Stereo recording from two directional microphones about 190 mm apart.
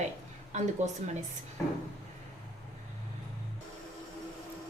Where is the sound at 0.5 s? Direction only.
40° right (ahead or behind).